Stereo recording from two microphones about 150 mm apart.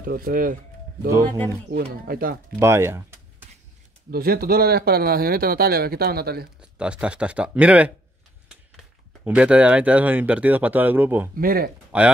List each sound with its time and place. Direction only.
0.0 s speech: 75° right (ahead or behind)
1.8 s speech: 80° right
2.6 s speech: 15° right (ahead or behind)
4.1 s speech: 85° right
6.6 s speech: 5° right (ahead or behind)
11.3 s speech: 80° right
11.9 s speech: 10° right (ahead or behind)